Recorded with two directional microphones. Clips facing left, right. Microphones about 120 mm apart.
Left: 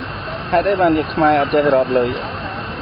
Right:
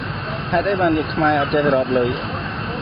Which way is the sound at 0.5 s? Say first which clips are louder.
Left 3 dB; centre (ahead or behind).